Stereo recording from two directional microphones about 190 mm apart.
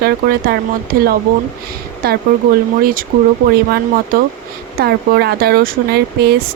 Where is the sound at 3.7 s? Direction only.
50° right (ahead or behind).